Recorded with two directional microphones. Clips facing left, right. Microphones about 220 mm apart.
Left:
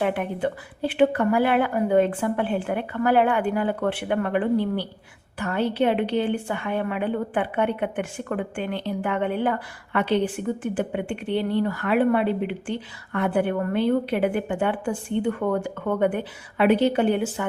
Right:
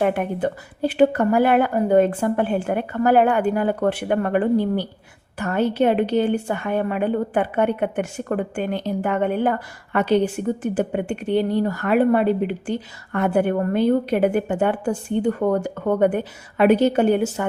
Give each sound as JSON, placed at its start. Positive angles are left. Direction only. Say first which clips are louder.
{"t": 0.0, "sound": "a woman's voice", "louder": "right 3 dB", "side_deg": -45}